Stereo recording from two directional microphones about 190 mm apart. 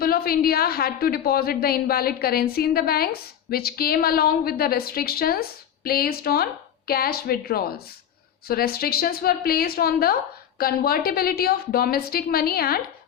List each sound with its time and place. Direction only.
0.0 s a woman's voice: 50° left (ahead or behind)